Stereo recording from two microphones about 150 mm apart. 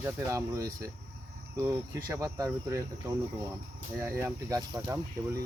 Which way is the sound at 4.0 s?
20° right (ahead or behind).